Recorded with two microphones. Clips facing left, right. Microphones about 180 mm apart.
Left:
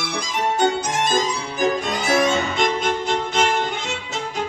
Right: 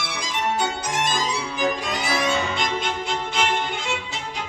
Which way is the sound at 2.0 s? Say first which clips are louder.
Left 5 dB; 45° left (ahead or behind).